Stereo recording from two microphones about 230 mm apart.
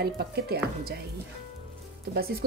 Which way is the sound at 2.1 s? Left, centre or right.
Right.